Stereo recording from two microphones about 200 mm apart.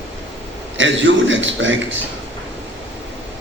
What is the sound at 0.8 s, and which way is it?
A man's voice, 70° right (ahead or behind).